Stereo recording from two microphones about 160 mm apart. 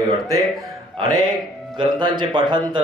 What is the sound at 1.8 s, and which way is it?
Speech, 30° right (ahead or behind).